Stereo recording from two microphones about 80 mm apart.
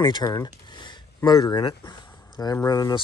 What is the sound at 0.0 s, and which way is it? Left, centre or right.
Speech, left.